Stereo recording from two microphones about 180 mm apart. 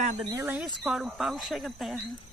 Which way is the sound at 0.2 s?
25° right (ahead or behind).